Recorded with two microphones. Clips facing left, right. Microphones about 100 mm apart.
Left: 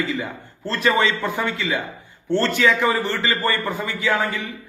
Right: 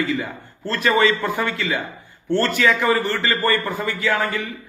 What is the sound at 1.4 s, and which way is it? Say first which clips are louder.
A man's voice: even; 15° left (ahead or behind).